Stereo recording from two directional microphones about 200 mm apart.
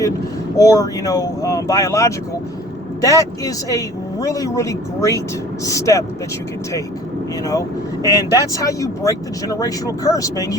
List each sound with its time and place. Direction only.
0.5 s speech: 15° left (ahead or behind)
8.1 s speech: 20° left (ahead or behind)